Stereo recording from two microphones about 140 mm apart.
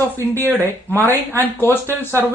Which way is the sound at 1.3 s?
15° left (ahead or behind).